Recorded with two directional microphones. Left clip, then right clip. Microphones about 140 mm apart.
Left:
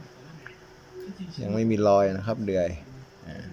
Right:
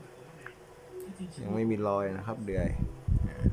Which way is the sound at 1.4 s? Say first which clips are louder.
Left 8 dB; 10° left (ahead or behind).